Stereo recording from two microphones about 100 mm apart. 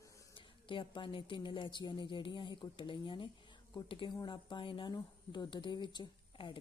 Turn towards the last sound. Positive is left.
turn(degrees=50)  # may be behind; listen again after turning